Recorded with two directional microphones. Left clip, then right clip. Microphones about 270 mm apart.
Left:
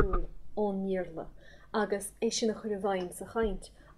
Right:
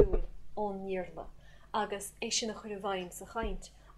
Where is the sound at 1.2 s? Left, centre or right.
Right.